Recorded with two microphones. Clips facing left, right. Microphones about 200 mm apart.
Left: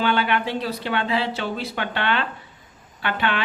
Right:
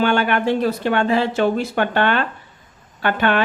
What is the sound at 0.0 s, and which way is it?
Speech, 45° right (ahead or behind).